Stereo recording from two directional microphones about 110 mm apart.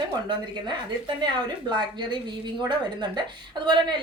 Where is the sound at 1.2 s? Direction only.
45° right (ahead or behind).